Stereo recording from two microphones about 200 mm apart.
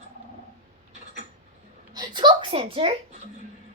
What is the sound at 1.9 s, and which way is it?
A woman's voice, 20° right (ahead or behind).